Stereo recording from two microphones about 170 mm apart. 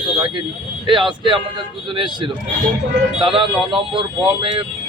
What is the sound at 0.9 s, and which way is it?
Speech, 30° right (ahead or behind).